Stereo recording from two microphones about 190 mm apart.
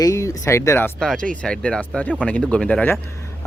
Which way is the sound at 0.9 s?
Centre (ahead or behind).